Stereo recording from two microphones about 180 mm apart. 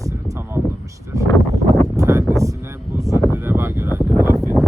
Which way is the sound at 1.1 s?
20° right (ahead or behind).